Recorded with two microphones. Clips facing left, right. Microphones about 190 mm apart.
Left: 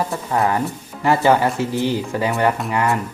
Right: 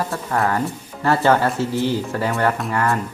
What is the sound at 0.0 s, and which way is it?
Speech, 15° left (ahead or behind).